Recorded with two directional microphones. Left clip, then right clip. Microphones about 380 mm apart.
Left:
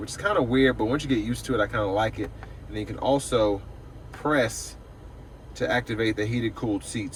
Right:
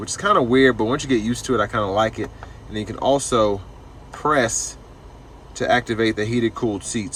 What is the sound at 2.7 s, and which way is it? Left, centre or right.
Speech, centre.